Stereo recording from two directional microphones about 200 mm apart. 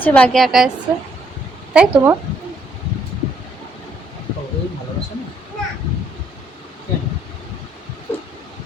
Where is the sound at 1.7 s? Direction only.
10° right (ahead or behind).